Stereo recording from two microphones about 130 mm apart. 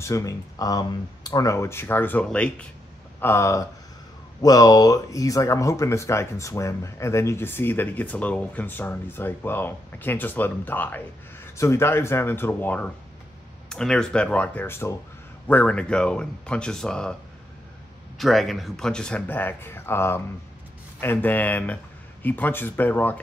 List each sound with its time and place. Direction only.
0.0 s speech: 25° left (ahead or behind); by 2.5 s 10° left (ahead or behind)
3.2 s speech: 20° left (ahead or behind)
18.1 s speech: centre (ahead or behind)